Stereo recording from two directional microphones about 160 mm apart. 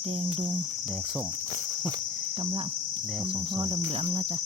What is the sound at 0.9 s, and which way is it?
Cricket, 5° right (ahead or behind).